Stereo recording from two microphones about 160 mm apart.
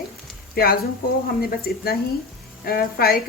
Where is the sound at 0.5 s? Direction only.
70° left (ahead or behind).